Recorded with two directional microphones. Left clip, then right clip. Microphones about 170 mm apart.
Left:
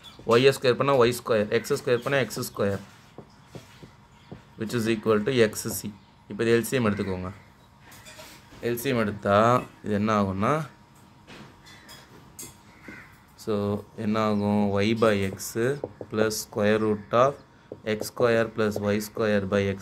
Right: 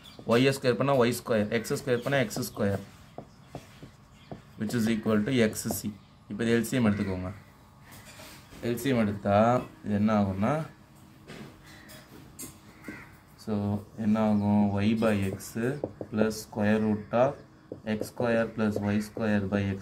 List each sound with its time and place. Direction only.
0.3 s speech: 25° left (ahead or behind)
4.6 s speech: 25° left (ahead or behind)
8.6 s speech: 30° left (ahead or behind); by 10.7 s 45° left (ahead or behind)
13.4 s speech: 45° left (ahead or behind)